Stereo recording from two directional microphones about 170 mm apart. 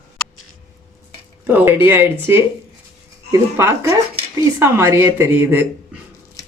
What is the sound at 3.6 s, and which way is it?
A woman's voice, 15° right (ahead or behind).